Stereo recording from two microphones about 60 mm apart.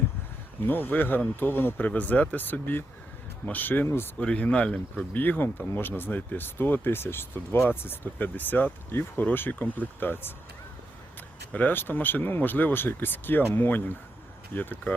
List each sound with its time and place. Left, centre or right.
0.6 s speech: left
4.2 s speech: left
5.1 s speech: left
11.5 s speech: left